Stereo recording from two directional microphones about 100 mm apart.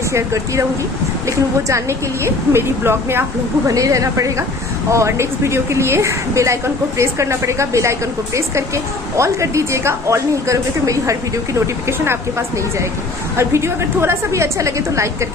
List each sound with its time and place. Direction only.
0.1 s a woman's voice: 30° right (ahead or behind)